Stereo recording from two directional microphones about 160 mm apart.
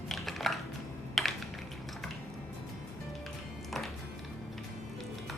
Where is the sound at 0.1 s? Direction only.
Centre (ahead or behind).